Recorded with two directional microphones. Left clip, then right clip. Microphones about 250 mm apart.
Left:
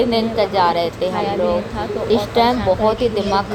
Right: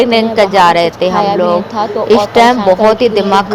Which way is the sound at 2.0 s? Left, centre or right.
Centre.